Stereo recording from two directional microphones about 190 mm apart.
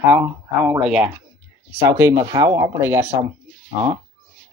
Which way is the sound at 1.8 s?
15° right (ahead or behind).